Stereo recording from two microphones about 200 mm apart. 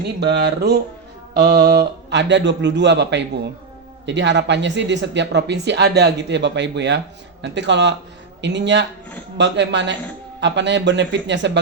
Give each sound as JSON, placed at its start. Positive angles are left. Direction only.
{"t": 0.2, "sound": "speech", "side_deg": -55}